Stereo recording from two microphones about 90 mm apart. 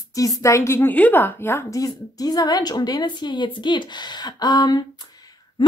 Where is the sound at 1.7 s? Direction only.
40° left (ahead or behind).